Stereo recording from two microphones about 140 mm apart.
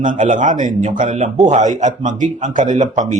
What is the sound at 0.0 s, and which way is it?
A man's voice, 65° right (ahead or behind).